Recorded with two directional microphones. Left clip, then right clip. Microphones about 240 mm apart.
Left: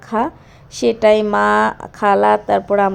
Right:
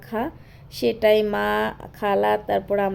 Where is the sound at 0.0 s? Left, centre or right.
Centre.